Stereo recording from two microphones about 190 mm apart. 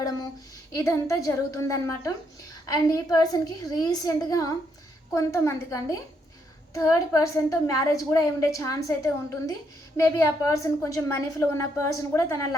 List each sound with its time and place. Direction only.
0.8 s a woman's voice: 15° left (ahead or behind)